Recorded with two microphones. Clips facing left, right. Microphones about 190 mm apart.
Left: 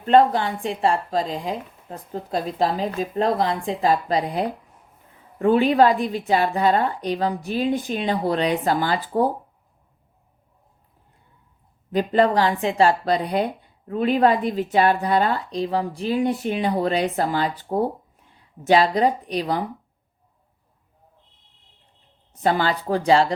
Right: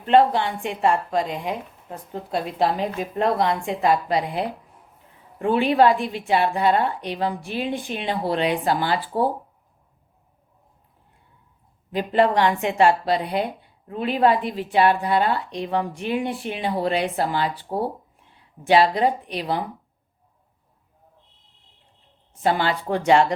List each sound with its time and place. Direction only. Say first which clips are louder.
0.0 s a woman's voice: left 1 dB; 40° left (ahead or behind)
11.9 s a woman's voice: left 1 dB; 40° left (ahead or behind)
22.4 s a woman's voice: left 1 dB; 40° left (ahead or behind)